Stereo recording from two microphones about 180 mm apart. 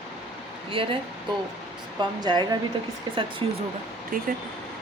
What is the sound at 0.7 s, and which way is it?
Speech, 30° right (ahead or behind).